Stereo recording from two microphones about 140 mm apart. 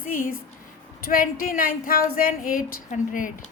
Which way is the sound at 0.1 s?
90° left.